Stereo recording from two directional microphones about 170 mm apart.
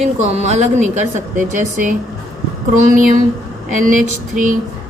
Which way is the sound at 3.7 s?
50° right (ahead or behind).